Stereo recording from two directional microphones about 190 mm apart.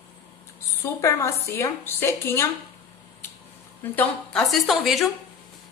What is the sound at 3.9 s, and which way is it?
A woman's voice, centre (ahead or behind).